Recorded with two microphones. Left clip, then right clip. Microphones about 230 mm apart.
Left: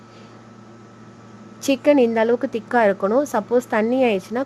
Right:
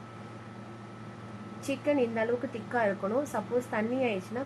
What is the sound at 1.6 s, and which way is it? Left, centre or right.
A woman's voice, left.